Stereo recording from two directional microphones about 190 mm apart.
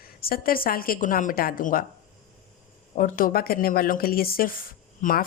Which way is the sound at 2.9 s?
45° left (ahead or behind).